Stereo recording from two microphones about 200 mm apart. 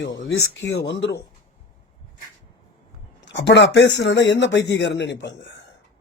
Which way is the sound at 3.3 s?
60° left (ahead or behind).